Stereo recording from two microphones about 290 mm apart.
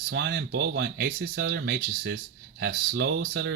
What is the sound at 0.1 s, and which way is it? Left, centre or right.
Speech, right.